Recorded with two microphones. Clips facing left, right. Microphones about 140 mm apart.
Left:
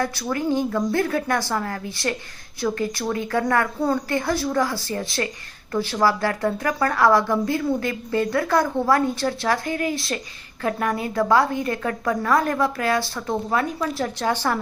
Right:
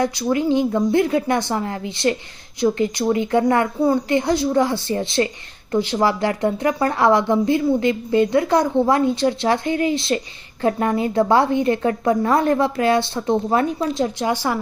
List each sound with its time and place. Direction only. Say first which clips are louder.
0.0 s a woman's voice: right 5 dB; 15° right (ahead or behind)